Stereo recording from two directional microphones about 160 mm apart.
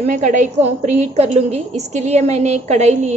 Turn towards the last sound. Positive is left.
turn(degrees=-45)  # may be behind; listen again after turning